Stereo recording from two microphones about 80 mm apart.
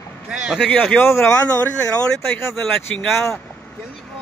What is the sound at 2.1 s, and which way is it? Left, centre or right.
Speech, centre.